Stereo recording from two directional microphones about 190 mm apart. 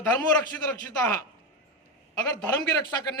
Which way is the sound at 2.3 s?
15° left (ahead or behind).